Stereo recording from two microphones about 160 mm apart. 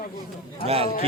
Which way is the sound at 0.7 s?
40° right (ahead or behind).